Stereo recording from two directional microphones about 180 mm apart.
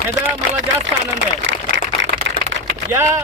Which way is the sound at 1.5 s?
90° right.